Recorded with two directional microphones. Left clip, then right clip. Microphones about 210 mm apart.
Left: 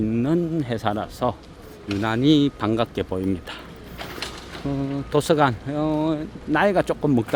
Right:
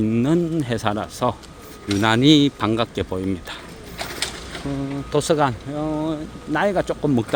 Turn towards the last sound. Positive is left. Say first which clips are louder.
# left 1 dB
turn(degrees=15)  # may be behind; listen again after turning